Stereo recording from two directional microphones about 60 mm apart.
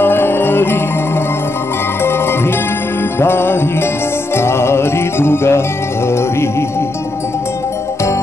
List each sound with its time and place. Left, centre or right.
0.0 s music: left
2.0 s music: left